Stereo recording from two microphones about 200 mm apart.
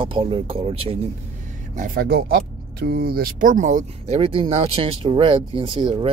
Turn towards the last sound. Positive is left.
turn(degrees=-25)  # may be behind; listen again after turning